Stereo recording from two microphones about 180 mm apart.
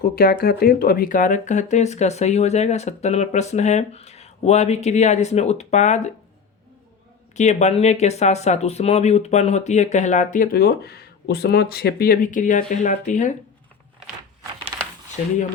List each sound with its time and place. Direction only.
0.0 s speech: 55° left (ahead or behind); by 6.1 s 40° left (ahead or behind)
7.3 s speech: 40° left (ahead or behind)
14.7 s a sound: 20° right (ahead or behind)
15.2 s speech: 40° left (ahead or behind)